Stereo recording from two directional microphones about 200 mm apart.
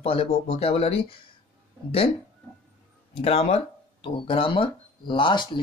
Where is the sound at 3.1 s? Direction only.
30° left (ahead or behind).